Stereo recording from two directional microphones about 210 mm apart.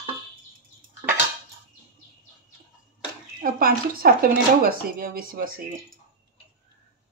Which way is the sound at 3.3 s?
45° right (ahead or behind).